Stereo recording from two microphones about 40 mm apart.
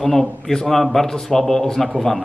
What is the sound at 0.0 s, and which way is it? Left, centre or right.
A man's voice, centre.